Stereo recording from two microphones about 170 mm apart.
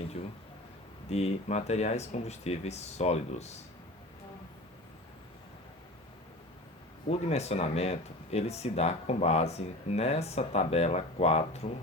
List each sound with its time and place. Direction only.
1.1 s speech: 40° left (ahead or behind)
7.1 s speech: 40° left (ahead or behind)